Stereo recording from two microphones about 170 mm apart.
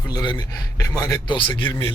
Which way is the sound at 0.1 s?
25° left (ahead or behind).